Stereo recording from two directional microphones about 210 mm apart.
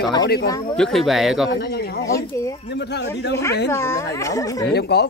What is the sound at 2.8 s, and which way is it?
Speech, 55° left (ahead or behind).